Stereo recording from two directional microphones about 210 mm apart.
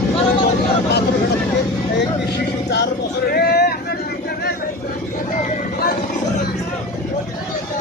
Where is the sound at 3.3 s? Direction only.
50° left (ahead or behind).